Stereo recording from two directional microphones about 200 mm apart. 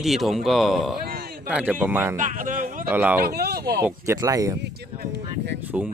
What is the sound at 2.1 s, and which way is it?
Speech, 40° right (ahead or behind).